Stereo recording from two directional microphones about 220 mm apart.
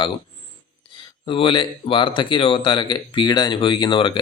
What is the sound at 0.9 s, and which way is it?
Speech, 20° left (ahead or behind).